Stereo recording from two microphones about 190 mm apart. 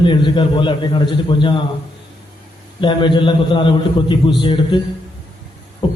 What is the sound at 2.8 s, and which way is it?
A man's voice, 25° left (ahead or behind).